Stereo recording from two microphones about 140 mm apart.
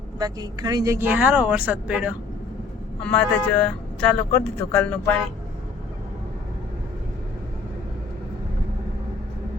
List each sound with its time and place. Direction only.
0.2 s a woman's voice: 25° right (ahead or behind)
0.9 s speech: 10° right (ahead or behind)
3.0 s speech: 10° left (ahead or behind)